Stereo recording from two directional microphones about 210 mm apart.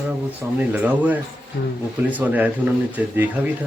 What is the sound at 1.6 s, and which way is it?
Speech, 50° left (ahead or behind).